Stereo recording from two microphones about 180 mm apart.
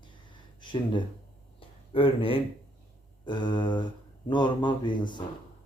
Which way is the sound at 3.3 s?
25° left (ahead or behind).